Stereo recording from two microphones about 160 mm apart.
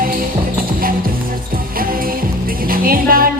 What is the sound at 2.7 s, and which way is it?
Music, 65° right (ahead or behind).